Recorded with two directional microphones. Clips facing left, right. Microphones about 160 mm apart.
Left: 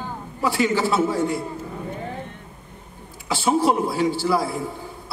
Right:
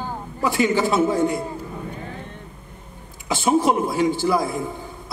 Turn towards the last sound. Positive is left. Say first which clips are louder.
# right 1 dB
turn(degrees=-20)  # may be behind; listen again after turning